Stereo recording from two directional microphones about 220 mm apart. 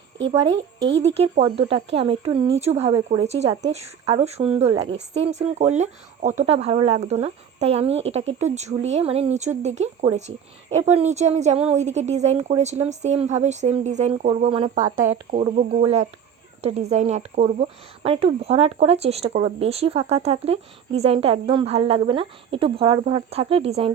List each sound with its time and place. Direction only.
0.8 s speech: 55° right (ahead or behind)
1.1 s speech: 25° right (ahead or behind)